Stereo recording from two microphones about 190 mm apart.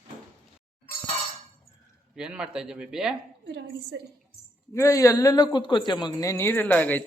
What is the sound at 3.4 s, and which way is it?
Speech, 65° right (ahead or behind).